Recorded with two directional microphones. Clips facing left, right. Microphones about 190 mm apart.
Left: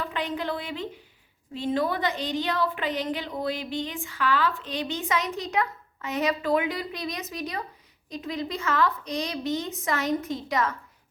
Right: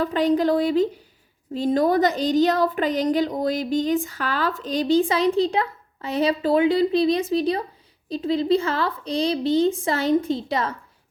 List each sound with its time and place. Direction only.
0.0 s a woman's voice: 35° right (ahead or behind)